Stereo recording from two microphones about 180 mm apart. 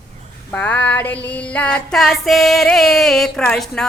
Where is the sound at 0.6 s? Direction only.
10° left (ahead or behind).